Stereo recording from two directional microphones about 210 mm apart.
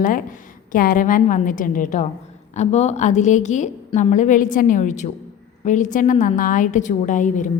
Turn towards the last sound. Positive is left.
turn(degrees=35)  # may be behind; listen again after turning